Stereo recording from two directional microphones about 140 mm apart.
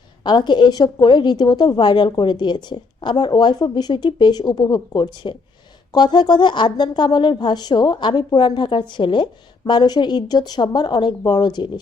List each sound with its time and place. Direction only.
0.3 s a woman's voice: 35° left (ahead or behind)